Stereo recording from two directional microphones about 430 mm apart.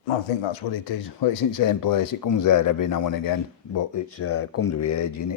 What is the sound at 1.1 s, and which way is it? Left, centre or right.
Speech, left.